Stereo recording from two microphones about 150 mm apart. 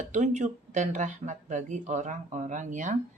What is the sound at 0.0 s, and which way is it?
Speech, 55° right (ahead or behind).